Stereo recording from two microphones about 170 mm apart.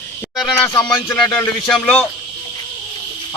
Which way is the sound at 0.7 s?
20° left (ahead or behind).